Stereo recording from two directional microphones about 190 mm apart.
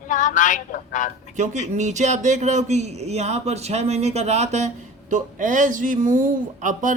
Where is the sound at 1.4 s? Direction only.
40° right (ahead or behind).